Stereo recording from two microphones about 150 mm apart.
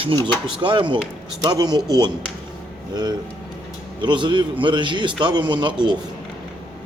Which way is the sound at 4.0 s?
30° right (ahead or behind).